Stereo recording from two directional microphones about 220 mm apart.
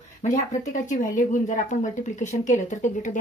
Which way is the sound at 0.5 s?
35° left (ahead or behind).